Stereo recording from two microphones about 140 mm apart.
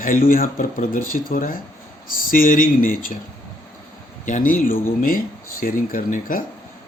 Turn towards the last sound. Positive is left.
turn(degrees=80)